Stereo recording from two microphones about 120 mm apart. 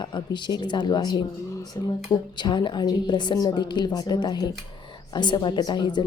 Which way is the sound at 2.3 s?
40° left (ahead or behind).